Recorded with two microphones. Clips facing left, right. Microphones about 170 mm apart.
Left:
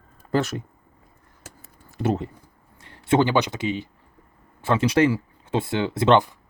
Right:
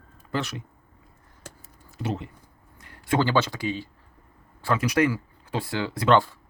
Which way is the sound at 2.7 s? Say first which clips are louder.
Left 5 dB; 25° left (ahead or behind).